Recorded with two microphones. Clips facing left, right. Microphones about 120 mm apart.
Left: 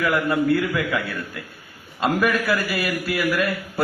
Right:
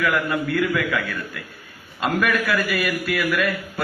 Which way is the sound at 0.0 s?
25° left (ahead or behind).